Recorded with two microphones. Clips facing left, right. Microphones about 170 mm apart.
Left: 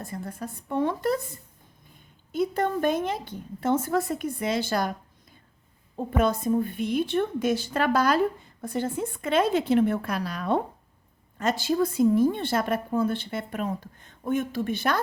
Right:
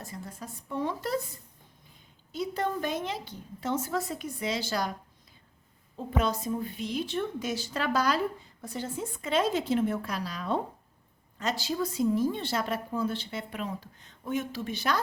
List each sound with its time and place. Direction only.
0.0 s a woman's voice: 55° left (ahead or behind)
2.3 s a woman's voice: 55° left (ahead or behind)
6.1 s a woman's voice: 55° left (ahead or behind)